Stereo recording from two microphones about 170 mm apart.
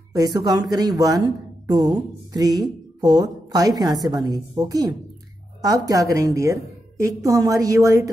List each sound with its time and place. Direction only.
0.1 s speech: 25° right (ahead or behind)